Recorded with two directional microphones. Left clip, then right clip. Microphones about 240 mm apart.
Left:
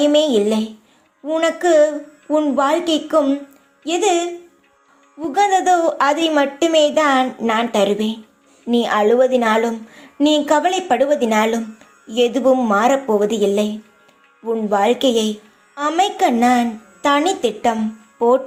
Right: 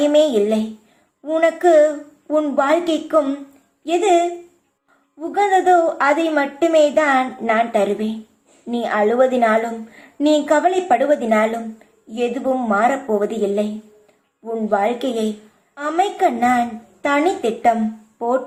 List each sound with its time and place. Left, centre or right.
0.0 s a woman's voice: left
5.3 s a woman's voice: left
14.7 s a woman's voice: left